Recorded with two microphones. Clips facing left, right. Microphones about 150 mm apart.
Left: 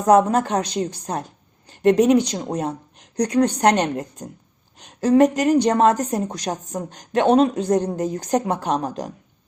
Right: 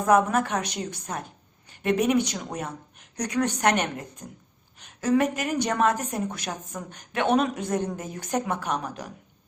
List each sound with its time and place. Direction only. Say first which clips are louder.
0.0 s a woman's voice: left 5 dB; 35° left (ahead or behind)